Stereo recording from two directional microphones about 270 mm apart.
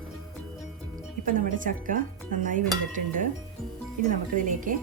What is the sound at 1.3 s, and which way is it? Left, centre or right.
Speech, right.